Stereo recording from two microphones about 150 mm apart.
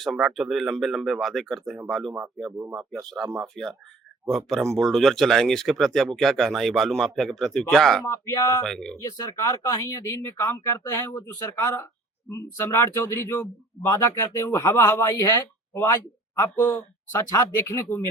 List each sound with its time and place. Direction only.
0.0 s speech: centre (ahead or behind)
8.0 s speech: 20° left (ahead or behind)
8.6 s speech: 5° left (ahead or behind)
9.0 s speech: 20° left (ahead or behind)